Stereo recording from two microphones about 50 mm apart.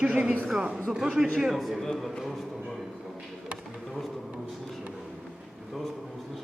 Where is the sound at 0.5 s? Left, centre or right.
Centre.